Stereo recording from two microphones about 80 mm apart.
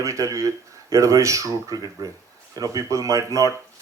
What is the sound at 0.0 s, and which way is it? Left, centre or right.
Speech, right.